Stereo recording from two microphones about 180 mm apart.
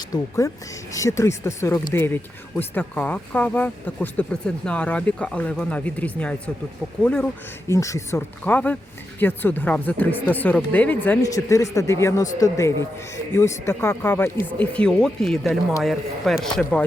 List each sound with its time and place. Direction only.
0.1 s speech: 20° left (ahead or behind)
7.7 s speech: 15° left (ahead or behind)